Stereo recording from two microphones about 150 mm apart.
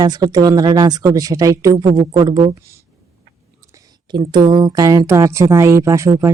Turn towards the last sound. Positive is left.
turn(degrees=-20)  # may be behind; listen again after turning